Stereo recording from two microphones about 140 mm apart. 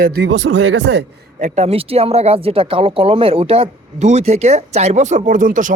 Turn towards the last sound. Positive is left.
turn(degrees=-70)  # may be behind; listen again after turning